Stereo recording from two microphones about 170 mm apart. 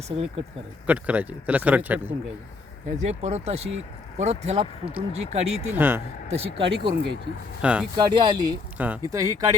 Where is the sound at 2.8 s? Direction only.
40° right (ahead or behind).